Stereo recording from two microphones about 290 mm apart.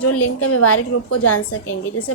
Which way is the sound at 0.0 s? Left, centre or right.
Left.